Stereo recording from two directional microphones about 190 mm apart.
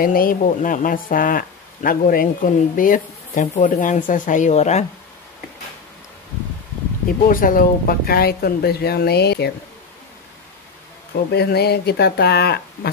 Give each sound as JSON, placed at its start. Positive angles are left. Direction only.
{"t": 0.0, "sound": "speech", "side_deg": 50}
{"t": 7.2, "sound": "speech", "side_deg": 45}
{"t": 11.3, "sound": "speech", "side_deg": 60}